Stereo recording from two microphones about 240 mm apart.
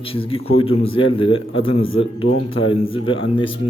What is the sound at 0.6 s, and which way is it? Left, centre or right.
Speech, left.